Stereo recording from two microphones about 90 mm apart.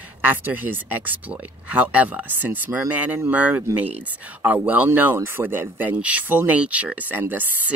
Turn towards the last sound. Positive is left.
turn(degrees=-20)  # may be behind; listen again after turning